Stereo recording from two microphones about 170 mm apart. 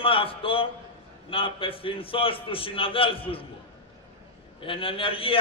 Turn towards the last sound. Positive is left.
turn(degrees=35)  # may be behind; listen again after turning